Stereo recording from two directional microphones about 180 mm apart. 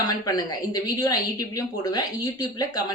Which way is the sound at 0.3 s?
20° left (ahead or behind).